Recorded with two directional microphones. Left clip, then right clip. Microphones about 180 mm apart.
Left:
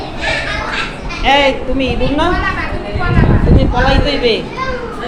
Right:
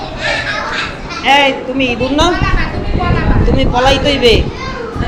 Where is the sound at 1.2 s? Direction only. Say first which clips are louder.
Right 1 dB; 10° left (ahead or behind).